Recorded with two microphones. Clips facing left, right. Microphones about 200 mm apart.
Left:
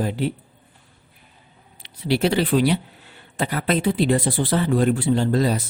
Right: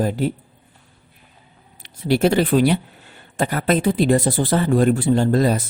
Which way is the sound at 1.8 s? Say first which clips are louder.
Right 3 dB; 45° right (ahead or behind).